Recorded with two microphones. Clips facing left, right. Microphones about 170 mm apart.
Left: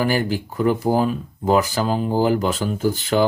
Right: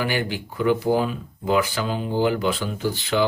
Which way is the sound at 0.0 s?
40° left (ahead or behind).